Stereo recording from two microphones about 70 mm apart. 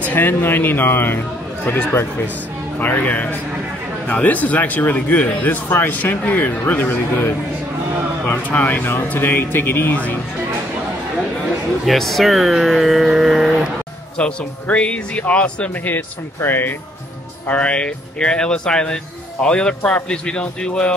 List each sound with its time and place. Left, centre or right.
0.0 s speech: left
2.8 s speech: left
8.5 s speech: left
11.8 s speech: centre
14.1 s speech: centre
15.9 s speech: left
17.5 s speech: centre